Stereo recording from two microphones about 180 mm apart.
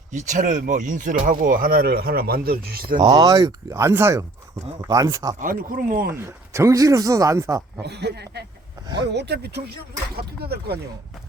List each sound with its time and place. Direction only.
0.1 s speech: 40° right (ahead or behind)
3.0 s speech: 20° right (ahead or behind)
5.4 s speech: 50° right (ahead or behind)
6.1 s speech: 15° right (ahead or behind)
7.8 s speech: 70° right (ahead or behind)